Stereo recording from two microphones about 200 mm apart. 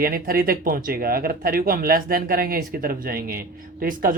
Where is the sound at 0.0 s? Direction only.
45° right (ahead or behind).